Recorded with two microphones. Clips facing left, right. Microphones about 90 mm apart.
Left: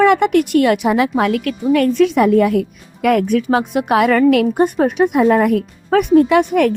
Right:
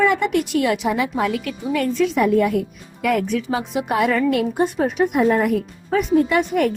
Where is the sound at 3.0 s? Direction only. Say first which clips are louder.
Left 6 dB; 55° left (ahead or behind).